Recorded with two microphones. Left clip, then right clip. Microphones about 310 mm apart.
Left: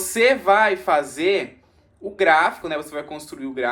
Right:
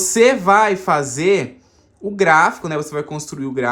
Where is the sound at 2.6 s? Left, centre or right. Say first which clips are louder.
Right 4 dB; right.